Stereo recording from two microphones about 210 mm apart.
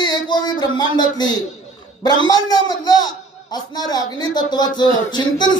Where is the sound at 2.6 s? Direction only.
20° left (ahead or behind).